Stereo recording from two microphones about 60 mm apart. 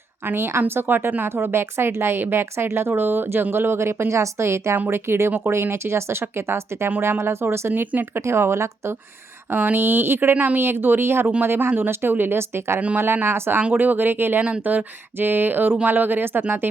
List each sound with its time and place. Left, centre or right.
0.3 s speech: right
7.7 s speech: right
8.2 s speech: right
9.5 s speech: right
13.6 s speech: right